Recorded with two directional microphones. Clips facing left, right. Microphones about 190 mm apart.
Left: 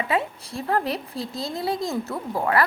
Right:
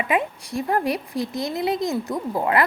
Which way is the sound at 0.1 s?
15° right (ahead or behind).